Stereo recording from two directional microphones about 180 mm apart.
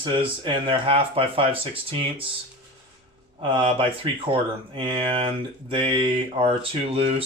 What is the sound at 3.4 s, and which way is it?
Speech, 30° right (ahead or behind).